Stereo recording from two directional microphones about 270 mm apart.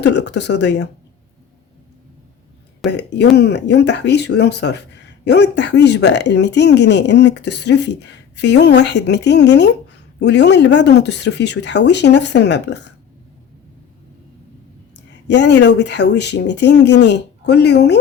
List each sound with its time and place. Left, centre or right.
0.0 s speech: left
2.9 s speech: left
14.9 s speech: left